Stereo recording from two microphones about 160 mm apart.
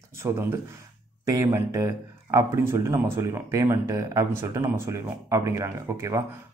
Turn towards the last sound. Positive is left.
turn(degrees=-20)  # may be behind; listen again after turning